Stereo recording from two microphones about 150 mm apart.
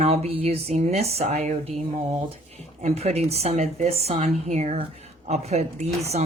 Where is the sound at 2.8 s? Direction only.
45° right (ahead or behind).